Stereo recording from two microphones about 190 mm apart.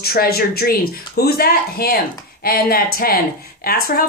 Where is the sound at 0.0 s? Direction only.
55° left (ahead or behind).